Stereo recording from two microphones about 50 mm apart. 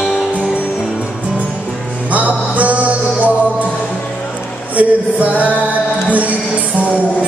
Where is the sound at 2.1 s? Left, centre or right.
Right.